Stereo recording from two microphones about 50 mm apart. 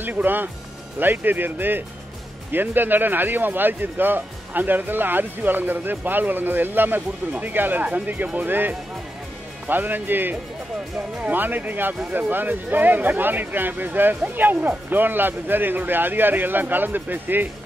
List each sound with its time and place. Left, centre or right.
0.0 s speech: right